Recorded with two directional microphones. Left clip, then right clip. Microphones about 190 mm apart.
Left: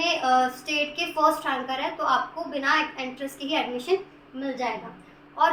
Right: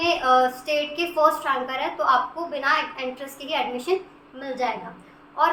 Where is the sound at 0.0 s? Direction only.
15° right (ahead or behind).